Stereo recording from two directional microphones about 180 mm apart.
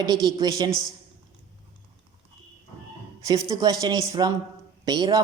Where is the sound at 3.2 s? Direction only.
20° right (ahead or behind).